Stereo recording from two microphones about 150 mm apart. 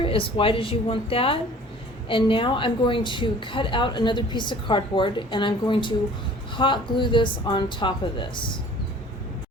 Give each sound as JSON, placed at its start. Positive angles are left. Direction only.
{"t": 0.0, "sound": "a woman's voice", "side_deg": 35}